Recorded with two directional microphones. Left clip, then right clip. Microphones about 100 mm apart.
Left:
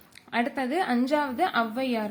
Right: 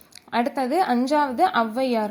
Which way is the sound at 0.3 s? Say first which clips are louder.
Right 5 dB; 40° right (ahead or behind).